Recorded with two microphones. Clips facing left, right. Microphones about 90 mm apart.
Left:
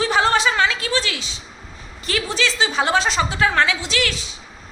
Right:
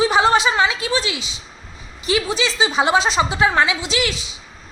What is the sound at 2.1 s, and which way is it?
A woman's voice, 15° right (ahead or behind).